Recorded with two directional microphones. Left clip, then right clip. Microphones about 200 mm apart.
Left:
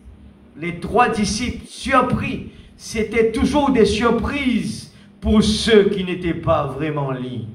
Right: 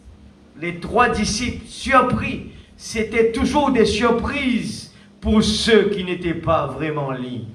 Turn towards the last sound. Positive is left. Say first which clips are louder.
# even
turn(degrees=45)  # may be behind; listen again after turning